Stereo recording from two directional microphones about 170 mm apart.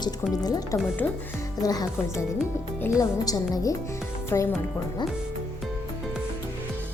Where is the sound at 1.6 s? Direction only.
20° left (ahead or behind).